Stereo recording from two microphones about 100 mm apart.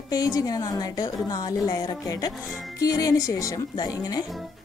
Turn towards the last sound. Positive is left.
turn(degrees=35)  # may be behind; listen again after turning